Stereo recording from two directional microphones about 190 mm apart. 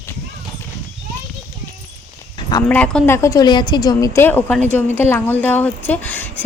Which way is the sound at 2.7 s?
5° left (ahead or behind).